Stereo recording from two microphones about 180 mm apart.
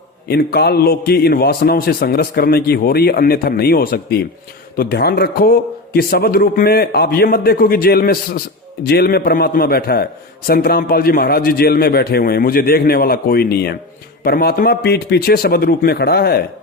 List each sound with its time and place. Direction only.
0.3 s a man's voice: 60° left (ahead or behind)